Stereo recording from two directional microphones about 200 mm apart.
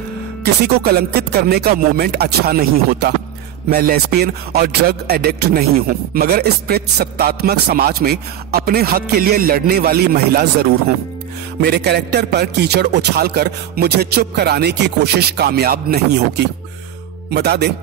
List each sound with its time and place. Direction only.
0.4 s a man's voice: 50° right (ahead or behind)